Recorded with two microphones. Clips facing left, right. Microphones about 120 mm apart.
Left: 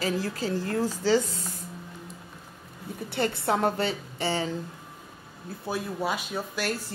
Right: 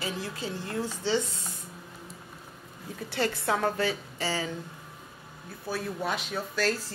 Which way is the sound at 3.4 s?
25° left (ahead or behind).